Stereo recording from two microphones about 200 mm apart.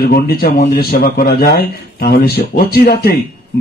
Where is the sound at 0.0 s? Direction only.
50° left (ahead or behind).